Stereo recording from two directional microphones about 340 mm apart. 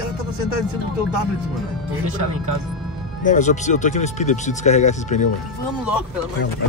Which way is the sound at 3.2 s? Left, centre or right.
Left.